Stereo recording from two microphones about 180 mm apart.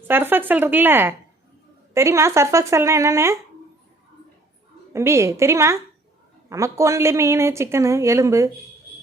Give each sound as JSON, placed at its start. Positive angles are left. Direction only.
{"t": 0.1, "sound": "speech", "side_deg": -10}
{"t": 4.9, "sound": "speech", "side_deg": -15}